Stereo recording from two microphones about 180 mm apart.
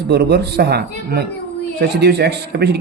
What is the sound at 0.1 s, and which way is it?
Speech, 65° right (ahead or behind).